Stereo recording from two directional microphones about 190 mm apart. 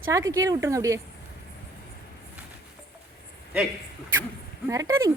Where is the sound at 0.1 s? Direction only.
15° right (ahead or behind).